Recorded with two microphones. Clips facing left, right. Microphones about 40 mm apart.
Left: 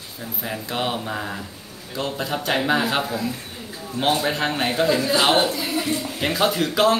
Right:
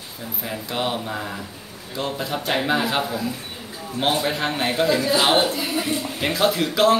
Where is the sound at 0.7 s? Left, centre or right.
Centre.